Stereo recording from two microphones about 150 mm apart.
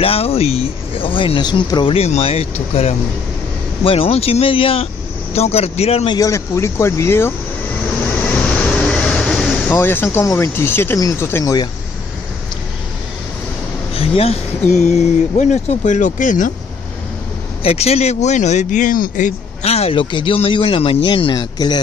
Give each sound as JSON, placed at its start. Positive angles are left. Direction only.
{"t": 0.0, "sound": "speech", "side_deg": 40}
{"t": 2.0, "sound": "speech", "side_deg": 45}
{"t": 6.1, "sound": "speech", "side_deg": 20}
{"t": 8.4, "sound": "vehicle", "side_deg": 5}
{"t": 9.7, "sound": "speech", "side_deg": 15}
{"t": 13.9, "sound": "a sound", "side_deg": 40}
{"t": 14.7, "sound": "speech", "side_deg": 50}
{"t": 17.6, "sound": "speech", "side_deg": 45}